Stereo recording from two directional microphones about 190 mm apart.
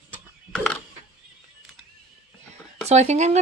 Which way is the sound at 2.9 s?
35° right (ahead or behind).